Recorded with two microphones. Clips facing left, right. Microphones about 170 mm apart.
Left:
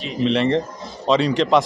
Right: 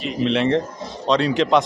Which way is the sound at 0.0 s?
Centre (ahead or behind).